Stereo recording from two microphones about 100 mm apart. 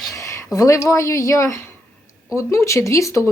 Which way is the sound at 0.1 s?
30° left (ahead or behind).